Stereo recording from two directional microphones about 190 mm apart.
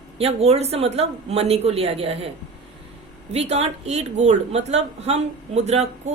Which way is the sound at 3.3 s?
35° right (ahead or behind).